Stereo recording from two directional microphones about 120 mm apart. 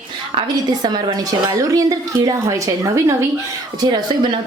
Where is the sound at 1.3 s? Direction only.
30° right (ahead or behind).